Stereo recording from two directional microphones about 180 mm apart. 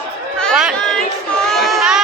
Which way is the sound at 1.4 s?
Centre (ahead or behind).